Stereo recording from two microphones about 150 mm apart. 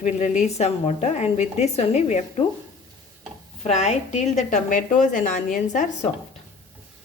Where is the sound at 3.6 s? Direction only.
45° left (ahead or behind).